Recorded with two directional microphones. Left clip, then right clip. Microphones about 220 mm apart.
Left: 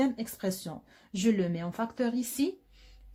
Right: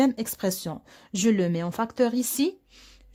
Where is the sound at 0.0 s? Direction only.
45° right (ahead or behind).